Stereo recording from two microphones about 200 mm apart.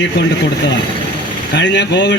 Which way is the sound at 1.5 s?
60° left (ahead or behind).